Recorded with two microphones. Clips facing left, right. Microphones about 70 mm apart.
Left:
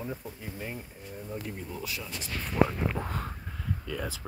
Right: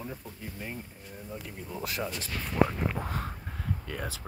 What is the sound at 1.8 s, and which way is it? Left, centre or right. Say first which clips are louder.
Speech: right 5 dB; right.